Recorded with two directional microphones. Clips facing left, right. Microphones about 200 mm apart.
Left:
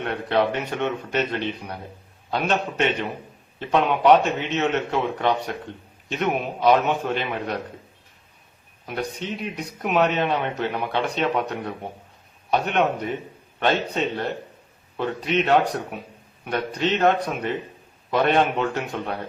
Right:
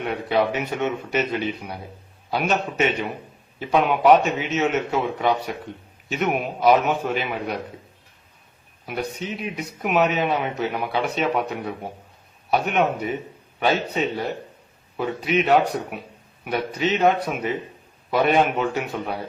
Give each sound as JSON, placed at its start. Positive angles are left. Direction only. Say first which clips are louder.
{"t": 0.0, "sound": "a man's voice", "louder": "even", "side_deg": -5}
{"t": 8.9, "sound": "a man's voice", "louder": "even", "side_deg": -5}